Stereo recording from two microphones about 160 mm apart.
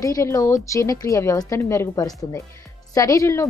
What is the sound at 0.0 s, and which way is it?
A woman's voice, 20° left (ahead or behind).